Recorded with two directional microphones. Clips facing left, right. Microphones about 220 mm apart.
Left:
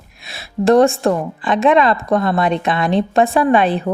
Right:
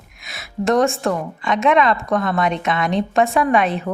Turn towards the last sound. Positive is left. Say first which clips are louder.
# left 3 dB
turn(degrees=35)  # may be behind; listen again after turning